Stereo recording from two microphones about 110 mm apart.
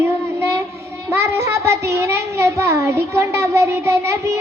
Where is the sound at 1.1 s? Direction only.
25° right (ahead or behind).